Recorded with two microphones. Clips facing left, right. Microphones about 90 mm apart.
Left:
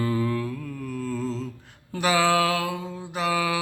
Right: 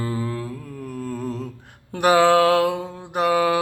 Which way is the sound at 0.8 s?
40° right (ahead or behind).